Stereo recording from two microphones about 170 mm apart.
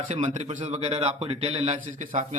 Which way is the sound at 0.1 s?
45° right (ahead or behind).